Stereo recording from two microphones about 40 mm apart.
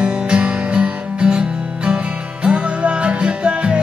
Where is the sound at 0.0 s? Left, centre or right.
Right.